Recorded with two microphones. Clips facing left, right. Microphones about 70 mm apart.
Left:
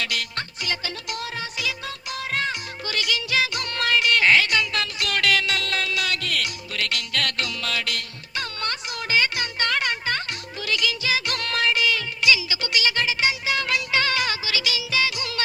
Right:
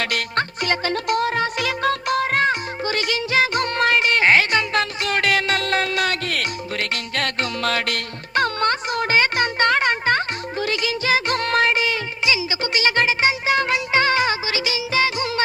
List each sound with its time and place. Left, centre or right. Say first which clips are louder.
0.0 s music: right 7 dB; right